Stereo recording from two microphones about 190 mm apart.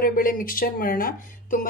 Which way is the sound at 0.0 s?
45° left (ahead or behind).